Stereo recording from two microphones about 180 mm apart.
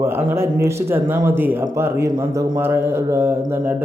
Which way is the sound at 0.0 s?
10° right (ahead or behind).